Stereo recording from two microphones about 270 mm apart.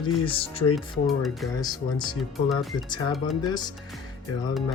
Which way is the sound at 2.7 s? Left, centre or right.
Centre.